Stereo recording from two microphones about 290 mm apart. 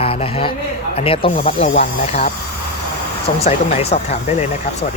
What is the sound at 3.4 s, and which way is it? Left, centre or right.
Speech, left.